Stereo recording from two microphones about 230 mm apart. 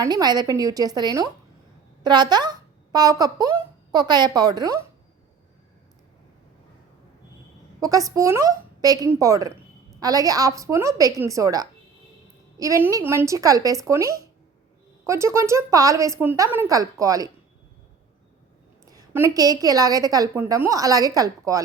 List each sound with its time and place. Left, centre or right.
0.0 s a woman's voice: centre
7.8 s a woman's voice: centre
18.9 s a woman's voice: centre